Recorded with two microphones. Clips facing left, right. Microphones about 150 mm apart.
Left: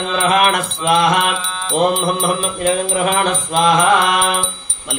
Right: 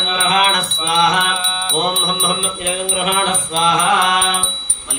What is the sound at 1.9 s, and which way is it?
Music, 45° left (ahead or behind).